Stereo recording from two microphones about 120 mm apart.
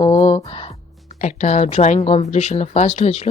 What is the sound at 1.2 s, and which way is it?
Speech, 80° left.